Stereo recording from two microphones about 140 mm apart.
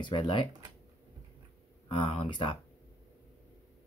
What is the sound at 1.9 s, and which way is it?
Speech, 35° left (ahead or behind).